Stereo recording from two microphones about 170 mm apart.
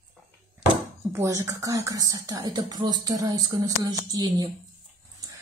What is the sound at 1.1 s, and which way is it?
Speech, 15° right (ahead or behind).